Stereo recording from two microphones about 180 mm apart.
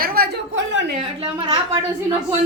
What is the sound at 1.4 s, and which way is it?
Speech, 30° right (ahead or behind).